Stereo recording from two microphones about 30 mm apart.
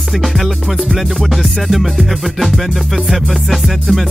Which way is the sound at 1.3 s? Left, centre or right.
Centre.